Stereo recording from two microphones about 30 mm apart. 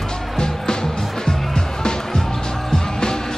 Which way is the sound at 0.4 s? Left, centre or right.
Left.